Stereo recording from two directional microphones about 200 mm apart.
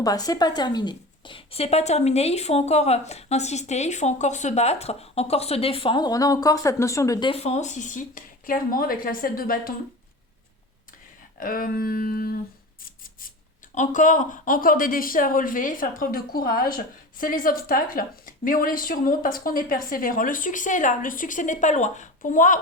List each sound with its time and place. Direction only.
0.0 s a woman's voice: 20° left (ahead or behind); by 9.7 s 45° left (ahead or behind)
11.3 s speech: 45° left (ahead or behind)
13.7 s speech: 40° left (ahead or behind)